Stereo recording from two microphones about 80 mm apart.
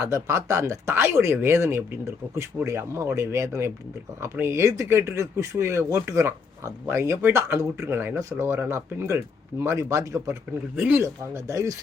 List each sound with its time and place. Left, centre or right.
0.0 s speech: right
10.8 s speech: right
11.0 s speech: right